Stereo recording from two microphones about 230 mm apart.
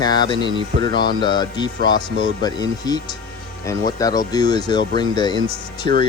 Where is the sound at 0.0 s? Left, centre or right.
Centre.